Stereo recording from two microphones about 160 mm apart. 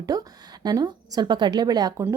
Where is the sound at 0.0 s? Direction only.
25° right (ahead or behind).